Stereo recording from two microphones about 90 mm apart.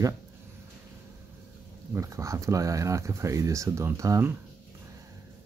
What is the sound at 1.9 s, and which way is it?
Speech, 35° right (ahead or behind).